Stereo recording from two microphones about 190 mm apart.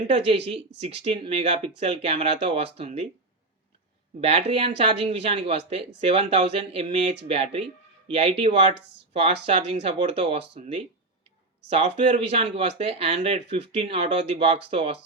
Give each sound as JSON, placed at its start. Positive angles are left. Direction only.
{"t": 0.3, "sound": "speech", "side_deg": -30}
{"t": 4.2, "sound": "speech", "side_deg": -30}